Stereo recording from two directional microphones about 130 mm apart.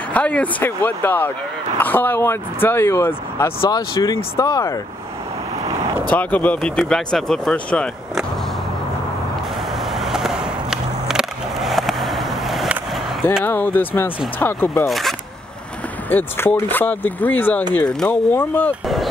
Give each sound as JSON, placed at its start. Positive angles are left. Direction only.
{"t": 0.1, "sound": "speech", "side_deg": 10}
{"t": 6.0, "sound": "speech", "side_deg": 10}
{"t": 9.9, "sound": "skateboard", "side_deg": -5}
{"t": 13.4, "sound": "speech", "side_deg": 15}
{"t": 14.9, "sound": "speech", "side_deg": 0}
{"t": 16.1, "sound": "speech", "side_deg": 15}